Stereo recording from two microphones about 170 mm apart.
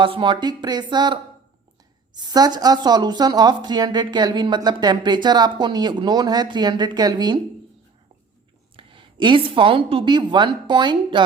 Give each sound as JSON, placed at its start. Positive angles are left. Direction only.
{"t": 0.0, "sound": "speech", "side_deg": -30}
{"t": 8.7, "sound": "a woman's voice", "side_deg": -30}